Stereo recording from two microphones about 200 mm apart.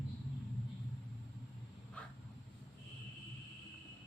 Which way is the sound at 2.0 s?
5° left (ahead or behind).